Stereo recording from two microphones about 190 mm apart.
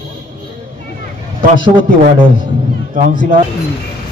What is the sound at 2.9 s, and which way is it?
Speech, 45° right (ahead or behind).